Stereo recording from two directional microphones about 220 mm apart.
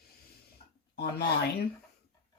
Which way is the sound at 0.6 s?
25° left (ahead or behind).